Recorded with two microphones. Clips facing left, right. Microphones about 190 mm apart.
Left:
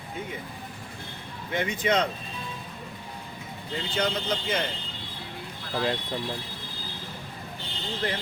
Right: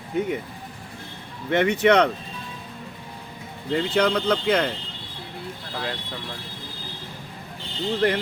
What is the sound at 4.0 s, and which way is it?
Speech, 70° right (ahead or behind).